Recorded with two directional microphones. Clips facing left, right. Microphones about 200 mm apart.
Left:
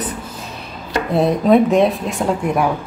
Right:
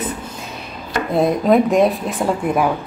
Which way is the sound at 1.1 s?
Centre (ahead or behind).